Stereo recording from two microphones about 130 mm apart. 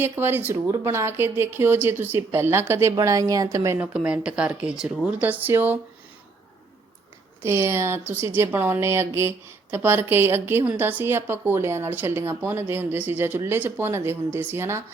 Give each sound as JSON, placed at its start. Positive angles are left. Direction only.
{"t": 0.0, "sound": "a woman's voice", "side_deg": -15}
{"t": 3.8, "sound": "a woman's voice", "side_deg": -10}
{"t": 7.4, "sound": "a woman's voice", "side_deg": -20}